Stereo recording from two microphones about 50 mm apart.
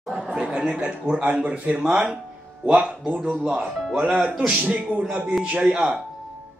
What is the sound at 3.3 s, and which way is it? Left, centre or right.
Speech, centre.